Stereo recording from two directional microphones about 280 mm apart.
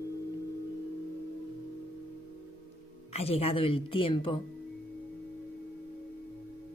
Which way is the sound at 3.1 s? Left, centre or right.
Left.